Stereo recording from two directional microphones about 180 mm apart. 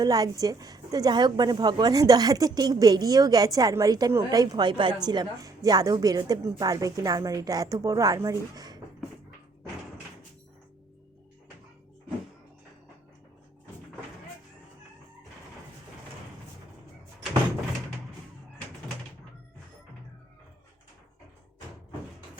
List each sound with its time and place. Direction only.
0.0 s a woman's voice: 20° right (ahead or behind)